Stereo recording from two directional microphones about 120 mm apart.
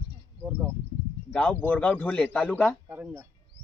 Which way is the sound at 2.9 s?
20° right (ahead or behind).